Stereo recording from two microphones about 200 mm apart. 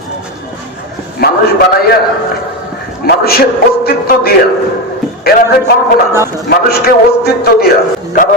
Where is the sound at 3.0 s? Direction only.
50° left (ahead or behind).